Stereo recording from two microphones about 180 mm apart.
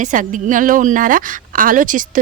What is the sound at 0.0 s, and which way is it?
A woman's voice, 45° right (ahead or behind).